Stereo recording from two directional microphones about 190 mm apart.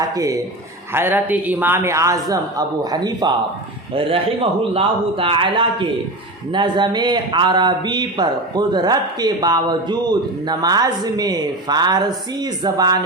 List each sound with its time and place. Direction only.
0.1 s a man's voice: 20° right (ahead or behind)
4.7 s a man's voice: 30° right (ahead or behind)